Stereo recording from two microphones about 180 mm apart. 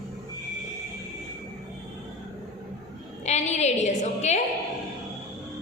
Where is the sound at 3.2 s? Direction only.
40° left (ahead or behind).